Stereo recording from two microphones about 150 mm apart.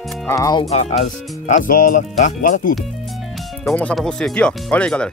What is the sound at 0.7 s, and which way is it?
Speech, 50° left (ahead or behind).